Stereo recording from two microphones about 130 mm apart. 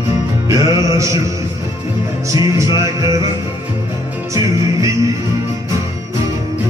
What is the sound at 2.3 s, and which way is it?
Music, 25° right (ahead or behind).